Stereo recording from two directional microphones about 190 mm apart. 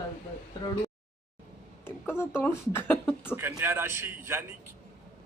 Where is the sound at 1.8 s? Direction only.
10° left (ahead or behind).